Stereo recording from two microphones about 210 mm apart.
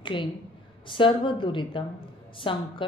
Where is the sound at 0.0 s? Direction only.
25° left (ahead or behind).